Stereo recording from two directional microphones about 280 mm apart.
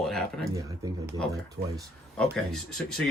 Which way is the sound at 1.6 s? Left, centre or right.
Right.